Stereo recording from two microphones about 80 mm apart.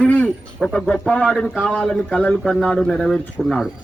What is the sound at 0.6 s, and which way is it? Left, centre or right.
Speech, centre.